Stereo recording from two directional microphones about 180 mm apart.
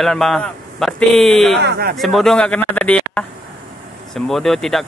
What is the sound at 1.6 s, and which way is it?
Speech, 65° right (ahead or behind).